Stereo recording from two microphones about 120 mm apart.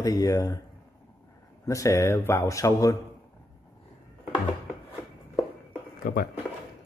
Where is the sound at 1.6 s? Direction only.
25° left (ahead or behind).